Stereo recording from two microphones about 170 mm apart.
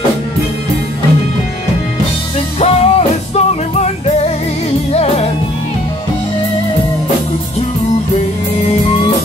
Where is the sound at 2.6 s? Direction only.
35° left (ahead or behind).